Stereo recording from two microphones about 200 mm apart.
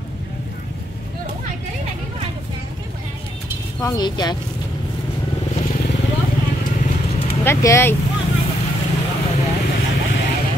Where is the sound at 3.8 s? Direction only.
20° left (ahead or behind).